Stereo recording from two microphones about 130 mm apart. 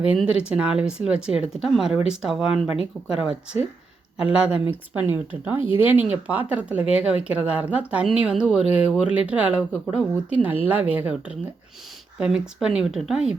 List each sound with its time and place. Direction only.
0.0 s speech: 10° right (ahead or behind)
5.5 s speech: 40° left (ahead or behind)
5.8 s speech: 15° right (ahead or behind)